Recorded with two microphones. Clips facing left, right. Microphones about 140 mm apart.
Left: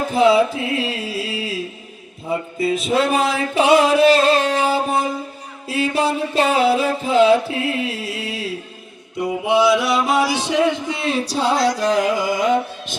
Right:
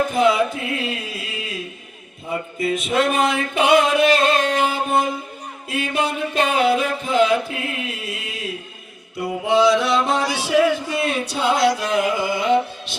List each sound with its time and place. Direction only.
0.0 s carnatic music: 30° left (ahead or behind)
2.6 s a sound: 30° left (ahead or behind)
2.9 s music: 30° left (ahead or behind)
9.5 s a sound: 10° left (ahead or behind)
10.4 s speech: 20° left (ahead or behind)
11.8 s music: 35° left (ahead or behind)